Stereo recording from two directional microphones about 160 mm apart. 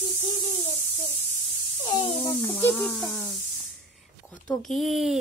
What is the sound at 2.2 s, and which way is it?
Speech, 25° left (ahead or behind).